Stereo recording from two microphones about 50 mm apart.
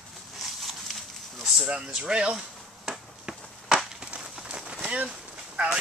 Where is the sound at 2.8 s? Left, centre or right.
Centre.